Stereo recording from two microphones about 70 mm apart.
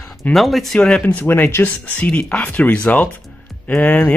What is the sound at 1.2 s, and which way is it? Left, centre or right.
Speech, left.